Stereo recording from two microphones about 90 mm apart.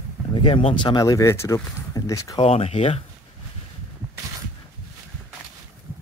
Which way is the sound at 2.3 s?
85° left.